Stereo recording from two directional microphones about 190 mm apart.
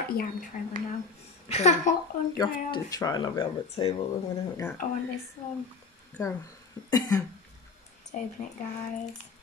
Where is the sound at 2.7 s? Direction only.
20° left (ahead or behind).